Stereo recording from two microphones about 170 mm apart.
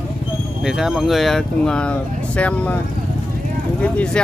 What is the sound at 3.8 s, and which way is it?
Speech, 5° left (ahead or behind).